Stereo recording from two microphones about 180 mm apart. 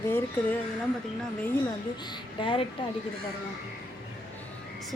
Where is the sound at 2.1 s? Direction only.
30° left (ahead or behind).